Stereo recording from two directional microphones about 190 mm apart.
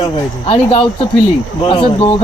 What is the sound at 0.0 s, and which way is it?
Speech, 30° left (ahead or behind).